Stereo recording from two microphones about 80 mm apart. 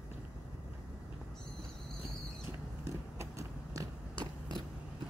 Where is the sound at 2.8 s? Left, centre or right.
Right.